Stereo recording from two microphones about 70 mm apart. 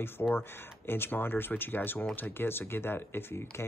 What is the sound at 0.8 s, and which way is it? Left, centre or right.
Speech, left.